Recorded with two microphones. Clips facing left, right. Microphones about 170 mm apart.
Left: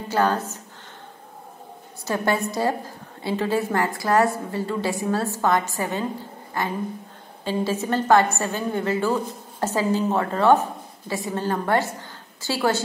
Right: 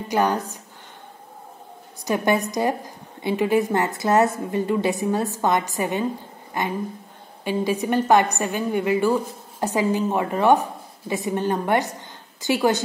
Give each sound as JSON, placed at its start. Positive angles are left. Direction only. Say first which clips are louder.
{"t": 0.1, "sound": "a woman's voice", "louder": "even", "side_deg": -15}
{"t": 2.0, "sound": "a woman's voice", "louder": "right 2 dB", "side_deg": -15}